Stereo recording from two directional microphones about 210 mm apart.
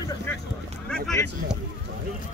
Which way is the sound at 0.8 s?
Centre (ahead or behind).